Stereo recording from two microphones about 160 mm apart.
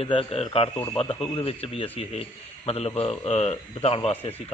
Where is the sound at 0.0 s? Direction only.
35° left (ahead or behind).